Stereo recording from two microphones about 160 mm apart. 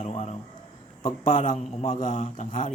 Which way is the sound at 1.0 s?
55° left (ahead or behind).